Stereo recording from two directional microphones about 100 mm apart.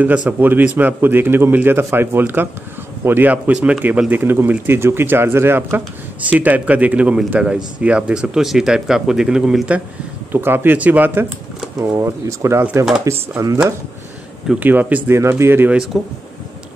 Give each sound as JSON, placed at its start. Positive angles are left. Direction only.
{"t": 0.0, "sound": "a man's voice", "side_deg": -15}
{"t": 10.3, "sound": "speech", "side_deg": -20}
{"t": 11.8, "sound": "speech", "side_deg": -30}
{"t": 14.6, "sound": "a man's voice", "side_deg": -15}
{"t": 15.1, "sound": "speech", "side_deg": -30}